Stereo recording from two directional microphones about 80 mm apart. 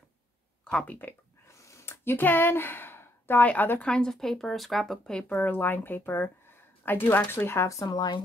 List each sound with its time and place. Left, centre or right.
0.7 s speech: centre
1.5 s a sound: left
3.4 s speech: left
3.8 s speech: centre
5.3 s speech: left
7.8 s speech: left